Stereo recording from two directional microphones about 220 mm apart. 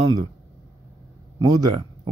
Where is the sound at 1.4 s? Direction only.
15° right (ahead or behind).